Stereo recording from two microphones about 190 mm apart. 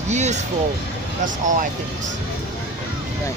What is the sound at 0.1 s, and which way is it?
Speech, 35° right (ahead or behind).